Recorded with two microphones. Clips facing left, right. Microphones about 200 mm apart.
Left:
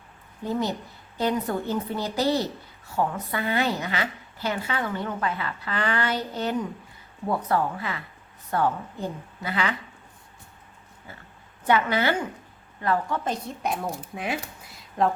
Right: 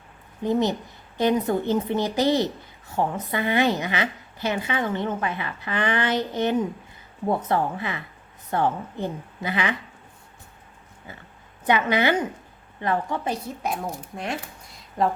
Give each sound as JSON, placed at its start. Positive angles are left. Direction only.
{"t": 0.4, "sound": "a woman's voice", "side_deg": -20}
{"t": 11.6, "sound": "a woman's voice", "side_deg": -20}